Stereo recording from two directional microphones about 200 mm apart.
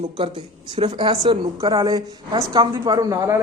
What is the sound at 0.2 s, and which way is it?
Speech, 25° right (ahead or behind).